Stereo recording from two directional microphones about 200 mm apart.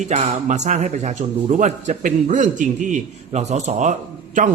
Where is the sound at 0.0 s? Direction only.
35° right (ahead or behind).